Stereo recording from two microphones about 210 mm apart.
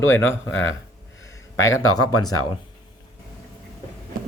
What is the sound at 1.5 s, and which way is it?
Speech, 70° left (ahead or behind).